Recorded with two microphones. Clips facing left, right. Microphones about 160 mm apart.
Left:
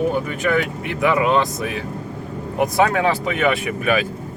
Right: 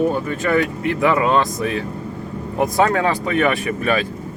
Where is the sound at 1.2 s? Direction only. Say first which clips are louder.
Right 1 dB; 15° left (ahead or behind).